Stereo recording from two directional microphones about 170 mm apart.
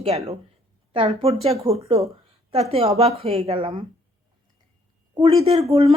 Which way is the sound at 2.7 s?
35° right (ahead or behind).